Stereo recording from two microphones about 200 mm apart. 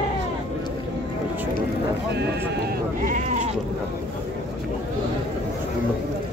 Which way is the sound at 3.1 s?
40° right (ahead or behind).